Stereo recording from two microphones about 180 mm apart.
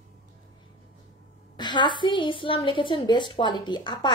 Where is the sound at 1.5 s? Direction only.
25° left (ahead or behind).